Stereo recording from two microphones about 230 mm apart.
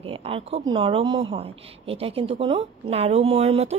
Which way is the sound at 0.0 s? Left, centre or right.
Right.